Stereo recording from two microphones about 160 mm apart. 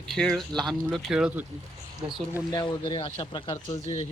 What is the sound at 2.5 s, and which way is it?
Speech, 25° left (ahead or behind).